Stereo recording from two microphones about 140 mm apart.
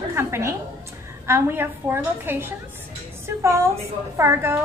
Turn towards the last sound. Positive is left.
turn(degrees=-20)  # may be behind; listen again after turning